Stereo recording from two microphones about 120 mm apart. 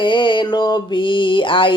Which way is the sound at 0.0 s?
40° left (ahead or behind).